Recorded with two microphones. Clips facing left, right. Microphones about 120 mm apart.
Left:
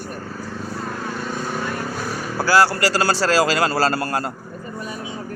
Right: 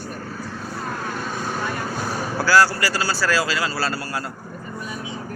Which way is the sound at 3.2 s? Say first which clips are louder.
Left 4 dB; 35° left (ahead or behind).